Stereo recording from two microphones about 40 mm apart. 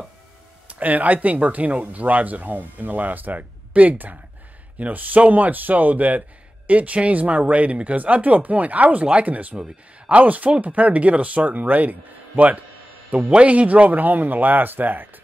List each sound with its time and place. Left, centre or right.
0.7 s speech: right
13.2 s speech: right